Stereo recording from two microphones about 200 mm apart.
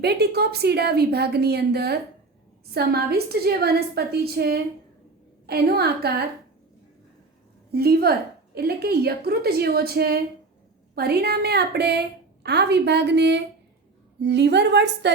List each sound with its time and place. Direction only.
0.0 s a woman's voice: 55° right (ahead or behind)
7.7 s a woman's voice: 50° right (ahead or behind)